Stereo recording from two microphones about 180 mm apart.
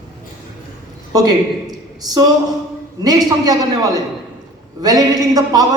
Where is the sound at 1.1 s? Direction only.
20° right (ahead or behind).